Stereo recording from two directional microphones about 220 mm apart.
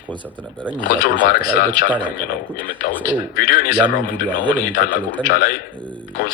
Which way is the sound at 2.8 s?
40° left (ahead or behind).